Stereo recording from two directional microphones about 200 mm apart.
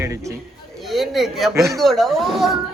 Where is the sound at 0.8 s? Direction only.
Centre (ahead or behind).